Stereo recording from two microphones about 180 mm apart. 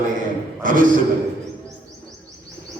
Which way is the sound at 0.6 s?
50° right (ahead or behind).